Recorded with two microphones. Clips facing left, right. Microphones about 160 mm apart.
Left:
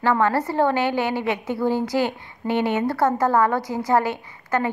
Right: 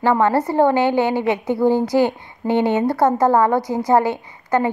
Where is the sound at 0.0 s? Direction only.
20° right (ahead or behind).